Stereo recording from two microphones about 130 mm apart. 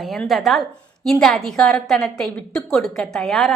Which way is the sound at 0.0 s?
Centre (ahead or behind).